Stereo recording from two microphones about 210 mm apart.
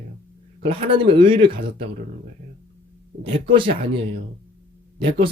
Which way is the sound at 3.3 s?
25° right (ahead or behind).